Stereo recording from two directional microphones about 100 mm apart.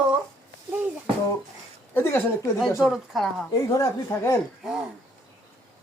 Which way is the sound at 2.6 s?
5° right (ahead or behind).